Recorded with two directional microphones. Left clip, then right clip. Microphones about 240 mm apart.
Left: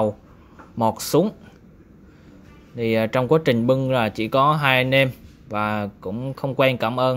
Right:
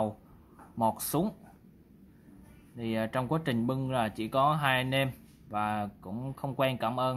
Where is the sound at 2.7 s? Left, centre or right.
Centre.